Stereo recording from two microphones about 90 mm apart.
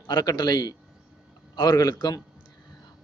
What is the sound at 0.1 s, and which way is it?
A man's voice, 55° left (ahead or behind).